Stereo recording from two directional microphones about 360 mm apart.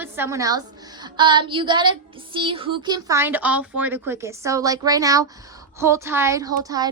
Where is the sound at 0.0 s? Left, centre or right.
Centre.